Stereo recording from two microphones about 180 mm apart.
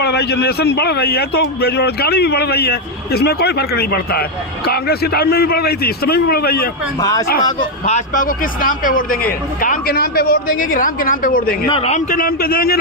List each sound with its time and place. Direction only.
0.0 s a man's voice: 65° left (ahead or behind)
7.0 s speech: 20° left (ahead or behind)
7.9 s a woman's voice: 45° left (ahead or behind)
11.7 s a woman's voice: 35° left (ahead or behind); by 12.8 s 55° left (ahead or behind)